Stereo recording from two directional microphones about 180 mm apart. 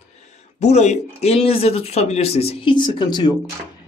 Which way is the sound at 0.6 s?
40° left (ahead or behind).